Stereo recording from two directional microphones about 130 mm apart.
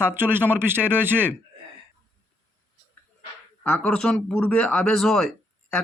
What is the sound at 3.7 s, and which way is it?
Speech, 5° left (ahead or behind).